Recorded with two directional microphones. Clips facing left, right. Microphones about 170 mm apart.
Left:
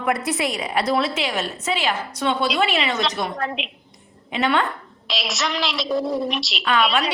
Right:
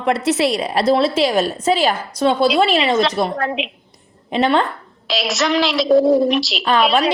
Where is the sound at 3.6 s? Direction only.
Centre (ahead or behind).